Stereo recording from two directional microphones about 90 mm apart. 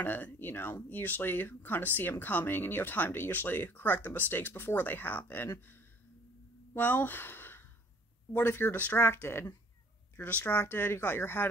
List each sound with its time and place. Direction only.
0.0 s speech: 20° left (ahead or behind)